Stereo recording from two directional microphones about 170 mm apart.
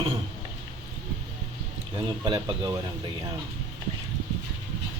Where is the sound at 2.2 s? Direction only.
30° right (ahead or behind).